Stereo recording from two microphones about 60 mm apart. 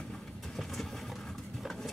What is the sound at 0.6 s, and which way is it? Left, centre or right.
Vehicle, centre.